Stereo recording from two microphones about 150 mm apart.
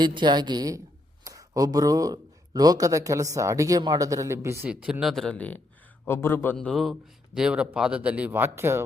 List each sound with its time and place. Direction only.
0.0 s a woman's voice: 30° right (ahead or behind)
4.7 s a man's voice: 5° right (ahead or behind)